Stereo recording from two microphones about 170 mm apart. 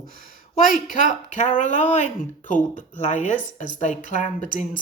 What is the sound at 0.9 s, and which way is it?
A woman's voice, 50° left (ahead or behind).